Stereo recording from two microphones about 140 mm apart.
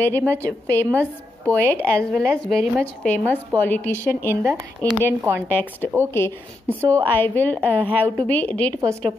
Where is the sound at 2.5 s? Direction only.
10° left (ahead or behind).